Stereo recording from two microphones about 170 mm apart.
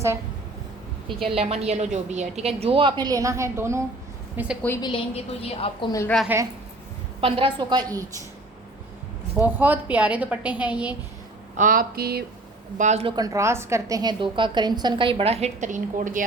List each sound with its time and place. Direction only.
1.2 s a woman's voice: 35° right (ahead or behind); by 4.5 s 10° right (ahead or behind)
4.8 s a woman's voice: 30° left (ahead or behind)
6.2 s a woman's voice: 15° right (ahead or behind)
7.2 s a woman's voice: 30° right (ahead or behind)
9.4 s a woman's voice: 10° right (ahead or behind)
11.5 s a sound: 55° right (ahead or behind)
12.7 s speech: 45° right (ahead or behind)
13.1 s a woman's voice: 20° right (ahead or behind); by 16.2 s 50° right (ahead or behind)